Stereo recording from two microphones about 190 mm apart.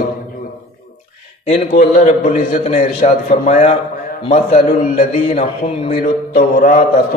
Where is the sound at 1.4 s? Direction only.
40° left (ahead or behind).